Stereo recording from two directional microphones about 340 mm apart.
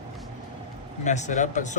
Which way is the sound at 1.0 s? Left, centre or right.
Left.